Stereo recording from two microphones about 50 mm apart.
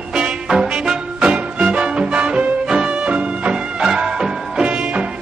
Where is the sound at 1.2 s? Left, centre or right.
Right.